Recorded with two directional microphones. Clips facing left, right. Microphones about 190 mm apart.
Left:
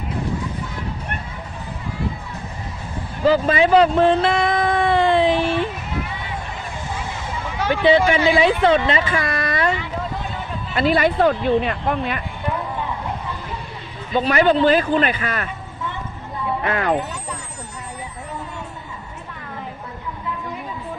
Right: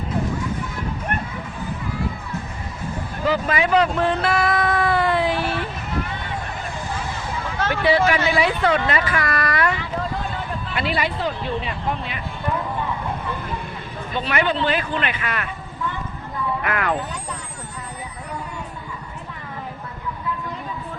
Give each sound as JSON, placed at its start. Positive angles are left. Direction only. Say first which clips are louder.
{"t": 3.2, "sound": "speech", "louder": "left 5 dB", "side_deg": 30}
{"t": 7.6, "sound": "speech", "louder": "left 3 dB", "side_deg": 15}
{"t": 8.9, "sound": "a sound", "louder": "left 2 dB", "side_deg": 25}
{"t": 10.8, "sound": "speech", "louder": "left 8 dB", "side_deg": 45}
{"t": 14.2, "sound": "speech", "louder": "left 6 dB", "side_deg": 40}
{"t": 16.6, "sound": "speech", "louder": "left 4 dB", "side_deg": 30}